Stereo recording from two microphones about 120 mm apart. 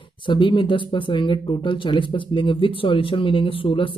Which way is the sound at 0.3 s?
45° left (ahead or behind).